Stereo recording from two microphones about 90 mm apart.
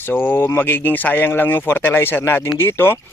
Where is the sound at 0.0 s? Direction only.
20° left (ahead or behind).